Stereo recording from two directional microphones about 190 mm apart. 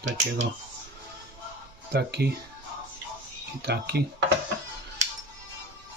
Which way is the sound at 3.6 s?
60° right (ahead or behind).